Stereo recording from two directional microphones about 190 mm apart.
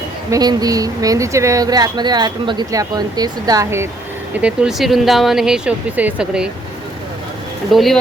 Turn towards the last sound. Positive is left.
turn(degrees=0)  # may be behind; listen again after turning